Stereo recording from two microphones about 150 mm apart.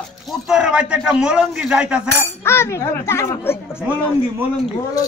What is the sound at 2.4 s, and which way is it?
Speech, 15° left (ahead or behind).